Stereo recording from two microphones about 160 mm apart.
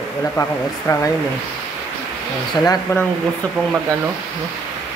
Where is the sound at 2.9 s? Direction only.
20° left (ahead or behind).